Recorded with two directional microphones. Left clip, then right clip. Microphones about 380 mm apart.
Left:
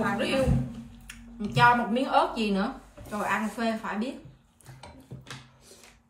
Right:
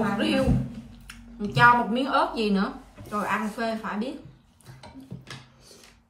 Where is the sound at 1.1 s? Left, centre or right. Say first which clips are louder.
Right 3 dB; centre.